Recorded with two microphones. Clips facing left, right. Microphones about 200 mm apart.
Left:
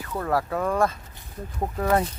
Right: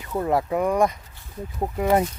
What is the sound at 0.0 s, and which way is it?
Speech, 20° right (ahead or behind).